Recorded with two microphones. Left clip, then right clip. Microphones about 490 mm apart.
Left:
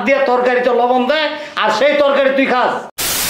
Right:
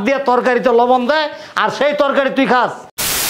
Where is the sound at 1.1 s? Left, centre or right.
Right.